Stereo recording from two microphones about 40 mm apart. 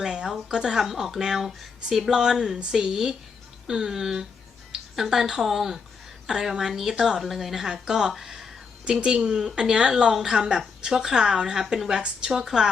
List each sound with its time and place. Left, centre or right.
0.0 s speech: centre
8.1 s a sound: centre
8.8 s a woman's voice: right